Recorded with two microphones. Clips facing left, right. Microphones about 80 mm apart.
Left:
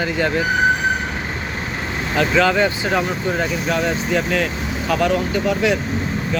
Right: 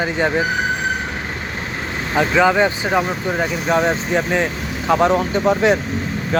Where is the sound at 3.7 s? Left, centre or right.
Right.